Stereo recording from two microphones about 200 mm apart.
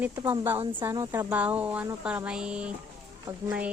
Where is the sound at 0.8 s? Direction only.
15° right (ahead or behind).